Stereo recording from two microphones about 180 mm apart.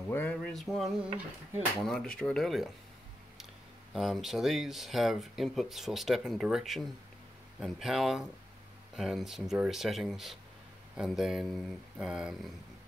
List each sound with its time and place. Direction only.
0.1 s speech: 10° left (ahead or behind)
3.9 s speech: centre (ahead or behind)